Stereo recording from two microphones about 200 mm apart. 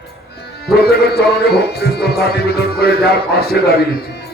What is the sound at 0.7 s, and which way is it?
A man's voice, 50° left (ahead or behind).